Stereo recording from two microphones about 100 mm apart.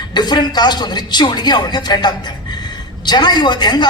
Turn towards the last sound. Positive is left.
turn(degrees=45)  # may be behind; listen again after turning